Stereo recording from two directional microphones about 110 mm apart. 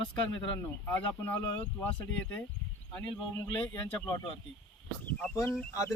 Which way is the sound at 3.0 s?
20° left (ahead or behind).